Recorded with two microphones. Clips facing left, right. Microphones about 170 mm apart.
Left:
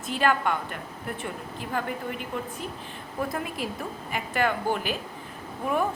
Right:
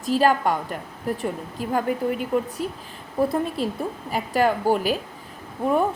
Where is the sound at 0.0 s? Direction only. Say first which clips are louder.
Right 5 dB; 35° right (ahead or behind).